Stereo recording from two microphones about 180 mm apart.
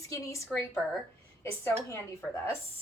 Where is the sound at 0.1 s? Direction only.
20° left (ahead or behind).